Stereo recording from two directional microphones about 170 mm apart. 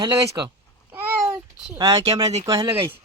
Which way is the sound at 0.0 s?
25° right (ahead or behind).